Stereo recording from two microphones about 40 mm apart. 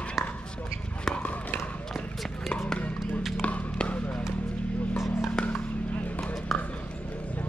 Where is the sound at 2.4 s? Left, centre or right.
Centre.